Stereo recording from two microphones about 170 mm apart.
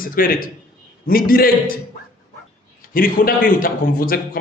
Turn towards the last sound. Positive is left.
turn(degrees=55)  # may be behind; listen again after turning